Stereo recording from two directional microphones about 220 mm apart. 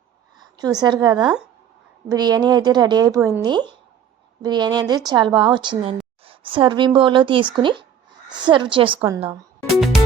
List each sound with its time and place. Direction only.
0.3 s a woman's voice: 15° right (ahead or behind)
1.2 s speech: 5° right (ahead or behind)
2.0 s a woman's voice: 20° right (ahead or behind)